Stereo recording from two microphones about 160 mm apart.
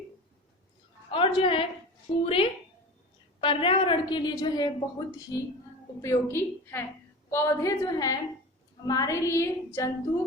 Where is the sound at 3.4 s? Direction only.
30° left (ahead or behind).